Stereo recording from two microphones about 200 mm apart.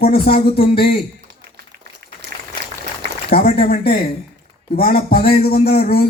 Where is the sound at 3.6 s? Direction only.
45° left (ahead or behind).